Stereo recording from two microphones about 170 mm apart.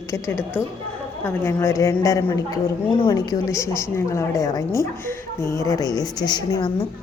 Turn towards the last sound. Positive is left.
turn(degrees=25)  # may be behind; listen again after turning